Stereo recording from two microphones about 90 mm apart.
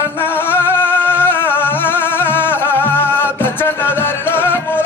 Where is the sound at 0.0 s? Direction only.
25° left (ahead or behind).